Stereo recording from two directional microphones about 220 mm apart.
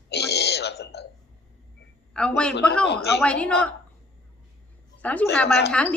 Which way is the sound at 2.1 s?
5° left (ahead or behind).